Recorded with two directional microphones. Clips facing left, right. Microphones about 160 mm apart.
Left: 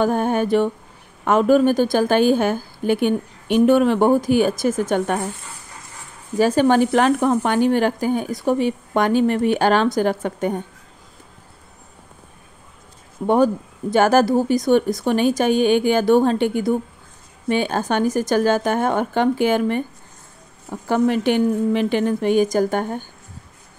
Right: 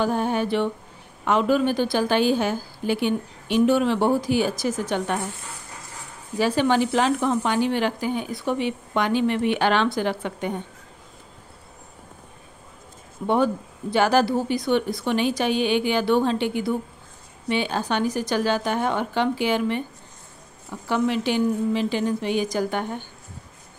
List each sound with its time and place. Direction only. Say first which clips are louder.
0.0 s speech: left 4 dB; 50° left (ahead or behind)
6.3 s speech: left 5 dB; 45° left (ahead or behind)
13.3 s speech: left 5 dB; 45° left (ahead or behind)